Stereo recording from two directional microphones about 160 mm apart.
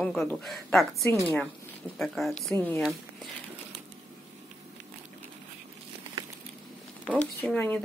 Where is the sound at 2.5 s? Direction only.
15° left (ahead or behind).